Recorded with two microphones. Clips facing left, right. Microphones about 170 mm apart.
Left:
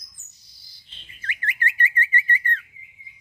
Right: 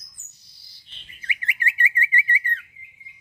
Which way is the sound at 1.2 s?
10° right (ahead or behind).